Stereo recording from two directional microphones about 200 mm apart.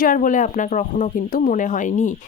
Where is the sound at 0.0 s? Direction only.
40° left (ahead or behind).